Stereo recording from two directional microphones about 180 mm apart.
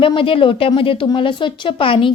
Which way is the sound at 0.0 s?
30° left (ahead or behind).